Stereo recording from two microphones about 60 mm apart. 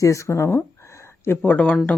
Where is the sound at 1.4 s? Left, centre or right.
Left.